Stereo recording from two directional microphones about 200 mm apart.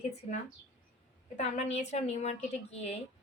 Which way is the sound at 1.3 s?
35° left (ahead or behind).